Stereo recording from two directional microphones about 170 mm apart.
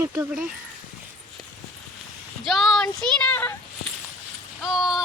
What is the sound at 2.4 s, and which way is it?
Speech, centre (ahead or behind).